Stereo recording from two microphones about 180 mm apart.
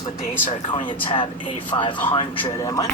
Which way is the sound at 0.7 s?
30° left (ahead or behind).